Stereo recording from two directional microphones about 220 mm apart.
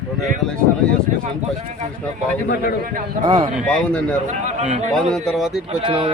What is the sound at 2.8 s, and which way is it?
Speech, 40° right (ahead or behind).